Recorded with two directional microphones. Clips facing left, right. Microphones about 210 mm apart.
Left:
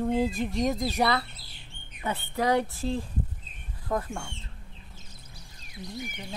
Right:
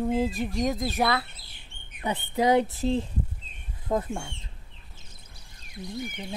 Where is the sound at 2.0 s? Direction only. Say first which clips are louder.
Right 3 dB; 15° right (ahead or behind).